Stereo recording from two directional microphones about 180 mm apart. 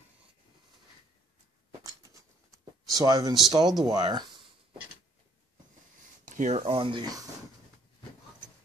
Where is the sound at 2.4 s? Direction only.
Centre (ahead or behind).